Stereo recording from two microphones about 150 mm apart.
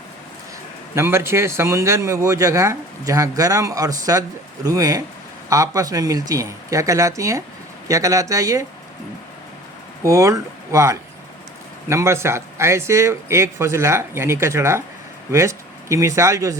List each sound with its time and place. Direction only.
0.9 s speech: 15° right (ahead or behind)
10.0 s speech: 20° right (ahead or behind)